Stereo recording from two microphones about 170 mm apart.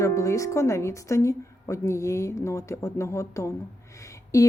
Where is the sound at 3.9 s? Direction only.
20° left (ahead or behind).